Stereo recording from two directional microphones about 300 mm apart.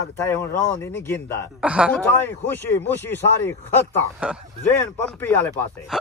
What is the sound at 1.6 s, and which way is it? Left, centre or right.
Speech, centre.